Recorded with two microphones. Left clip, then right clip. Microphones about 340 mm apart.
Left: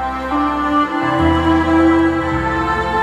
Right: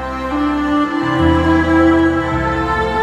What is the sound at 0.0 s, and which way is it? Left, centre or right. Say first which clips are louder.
Music: left 1 dB; centre.